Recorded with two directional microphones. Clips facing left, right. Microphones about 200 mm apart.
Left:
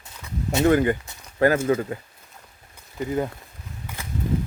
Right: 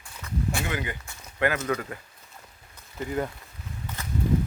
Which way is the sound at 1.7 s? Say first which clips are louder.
Left 7 dB; 25° left (ahead or behind).